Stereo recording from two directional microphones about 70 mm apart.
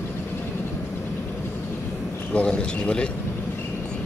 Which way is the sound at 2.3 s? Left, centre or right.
Centre.